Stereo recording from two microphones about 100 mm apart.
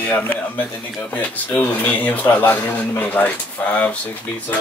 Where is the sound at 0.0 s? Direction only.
15° left (ahead or behind).